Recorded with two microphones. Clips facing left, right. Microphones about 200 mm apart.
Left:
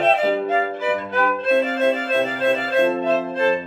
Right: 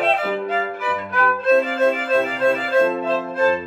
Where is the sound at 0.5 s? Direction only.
20° left (ahead or behind).